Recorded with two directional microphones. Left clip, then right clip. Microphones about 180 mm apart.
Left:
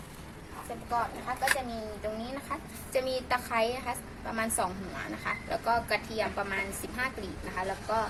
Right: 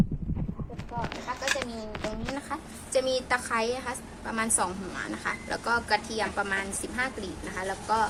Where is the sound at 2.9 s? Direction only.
25° right (ahead or behind).